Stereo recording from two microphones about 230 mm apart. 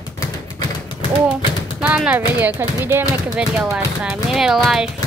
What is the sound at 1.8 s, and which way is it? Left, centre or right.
Speech, centre.